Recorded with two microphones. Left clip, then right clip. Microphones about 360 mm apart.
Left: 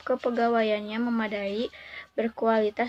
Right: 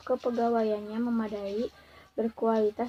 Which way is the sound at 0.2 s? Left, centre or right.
Left.